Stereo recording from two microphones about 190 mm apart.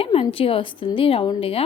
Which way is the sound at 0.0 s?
30° left (ahead or behind).